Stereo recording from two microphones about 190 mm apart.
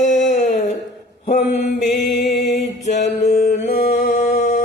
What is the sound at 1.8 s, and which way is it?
Music, centre (ahead or behind).